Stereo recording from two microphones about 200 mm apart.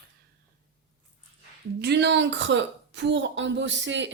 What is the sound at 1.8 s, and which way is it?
Speech, 55° right (ahead or behind).